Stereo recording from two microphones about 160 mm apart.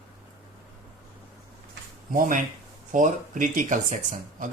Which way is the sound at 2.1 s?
60° right (ahead or behind).